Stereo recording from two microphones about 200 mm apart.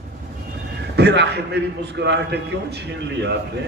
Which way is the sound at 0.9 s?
60° right (ahead or behind).